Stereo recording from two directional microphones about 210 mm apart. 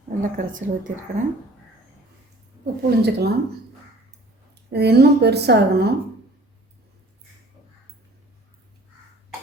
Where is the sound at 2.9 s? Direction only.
50° right (ahead or behind).